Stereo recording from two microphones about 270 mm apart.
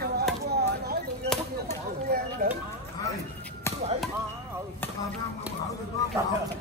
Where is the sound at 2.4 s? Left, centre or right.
Right.